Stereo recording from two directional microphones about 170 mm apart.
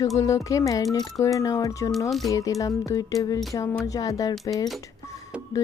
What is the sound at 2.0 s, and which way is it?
Speech, centre (ahead or behind).